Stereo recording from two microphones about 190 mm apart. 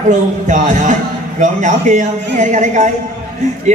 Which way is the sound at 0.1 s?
40° right (ahead or behind).